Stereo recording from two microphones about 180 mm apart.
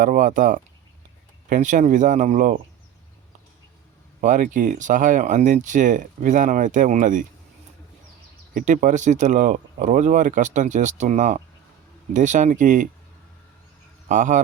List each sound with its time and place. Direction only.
0.0 s speech: 50° right (ahead or behind)
4.2 s speech: 45° right (ahead or behind)
8.5 s speech: 45° right (ahead or behind)
14.1 s speech: 45° right (ahead or behind)